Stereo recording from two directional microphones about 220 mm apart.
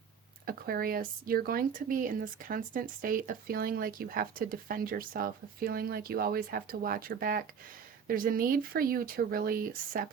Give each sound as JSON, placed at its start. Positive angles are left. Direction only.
{"t": 0.4, "sound": "speech", "side_deg": -45}